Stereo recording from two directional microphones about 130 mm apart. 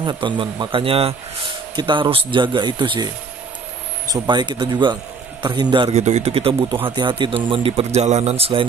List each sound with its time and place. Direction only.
0.0 s speech: 35° right (ahead or behind)
4.1 s speech: 35° right (ahead or behind)
5.9 s a man's voice: 60° right (ahead or behind)